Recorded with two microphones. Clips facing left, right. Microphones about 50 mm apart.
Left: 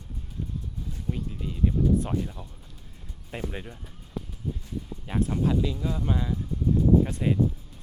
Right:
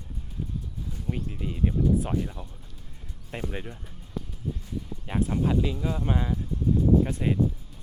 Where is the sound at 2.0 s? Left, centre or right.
Centre.